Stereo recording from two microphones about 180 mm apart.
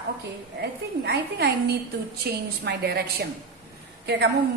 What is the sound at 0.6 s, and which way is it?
A woman's voice, 65° right (ahead or behind).